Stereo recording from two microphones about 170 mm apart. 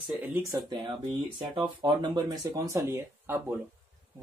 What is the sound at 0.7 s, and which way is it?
Speech, 30° right (ahead or behind).